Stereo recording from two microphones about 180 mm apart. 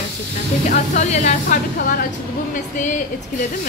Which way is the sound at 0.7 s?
45° left (ahead or behind).